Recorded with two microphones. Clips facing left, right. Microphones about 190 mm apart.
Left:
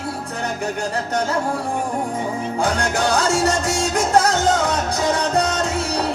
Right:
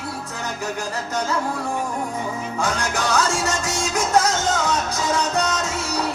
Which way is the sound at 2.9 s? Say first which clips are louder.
Left 3 dB; 30° left (ahead or behind).